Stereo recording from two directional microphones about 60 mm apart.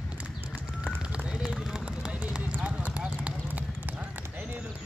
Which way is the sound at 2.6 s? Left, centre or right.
Right.